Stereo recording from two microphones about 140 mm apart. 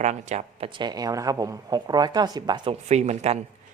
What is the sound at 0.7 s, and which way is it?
Speech, 30° right (ahead or behind).